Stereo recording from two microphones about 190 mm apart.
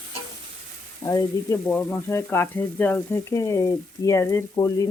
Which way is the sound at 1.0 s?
15° left (ahead or behind).